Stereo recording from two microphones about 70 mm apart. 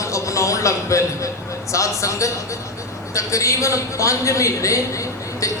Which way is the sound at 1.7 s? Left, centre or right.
Left.